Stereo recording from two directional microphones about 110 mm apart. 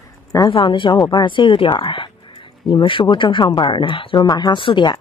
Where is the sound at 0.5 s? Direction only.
50° left (ahead or behind).